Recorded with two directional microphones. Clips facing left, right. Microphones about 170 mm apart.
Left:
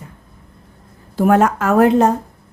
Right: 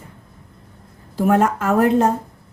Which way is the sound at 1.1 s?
85° left.